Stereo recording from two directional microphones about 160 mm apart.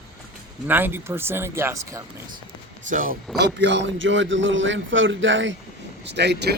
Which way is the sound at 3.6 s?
90° right.